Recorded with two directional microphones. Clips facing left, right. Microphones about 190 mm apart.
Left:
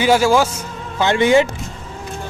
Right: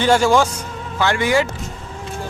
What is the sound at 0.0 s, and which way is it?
Speech, 5° left (ahead or behind).